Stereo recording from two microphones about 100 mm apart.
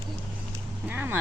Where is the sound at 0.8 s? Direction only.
20° right (ahead or behind).